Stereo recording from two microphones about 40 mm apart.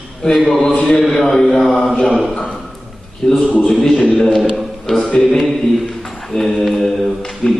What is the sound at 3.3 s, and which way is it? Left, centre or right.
A man's voice, centre.